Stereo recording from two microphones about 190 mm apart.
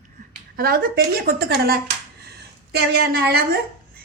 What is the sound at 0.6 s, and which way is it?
A woman's voice, 50° right (ahead or behind).